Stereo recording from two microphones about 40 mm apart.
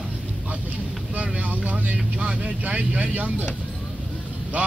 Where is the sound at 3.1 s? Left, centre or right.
Right.